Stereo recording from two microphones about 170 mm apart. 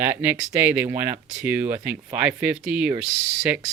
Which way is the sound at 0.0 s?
10° right (ahead or behind).